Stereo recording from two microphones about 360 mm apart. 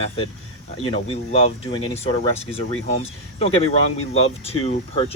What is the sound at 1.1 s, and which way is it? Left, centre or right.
Speech, centre.